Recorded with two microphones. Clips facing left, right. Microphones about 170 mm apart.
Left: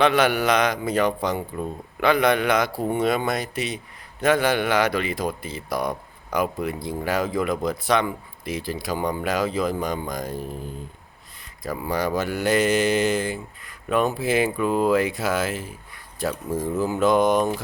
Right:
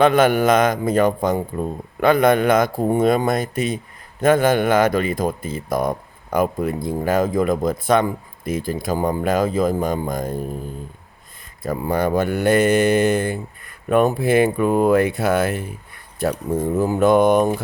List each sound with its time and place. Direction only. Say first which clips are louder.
0.0 s a man's voice: right 5 dB; 45° right (ahead or behind)
11.6 s speech: right 5 dB; 55° right (ahead or behind)